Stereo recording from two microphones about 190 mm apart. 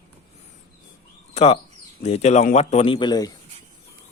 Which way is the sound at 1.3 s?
35° left (ahead or behind).